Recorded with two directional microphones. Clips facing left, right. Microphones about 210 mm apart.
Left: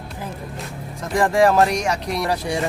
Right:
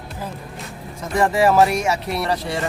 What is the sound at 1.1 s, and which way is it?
Speech, 5° right (ahead or behind).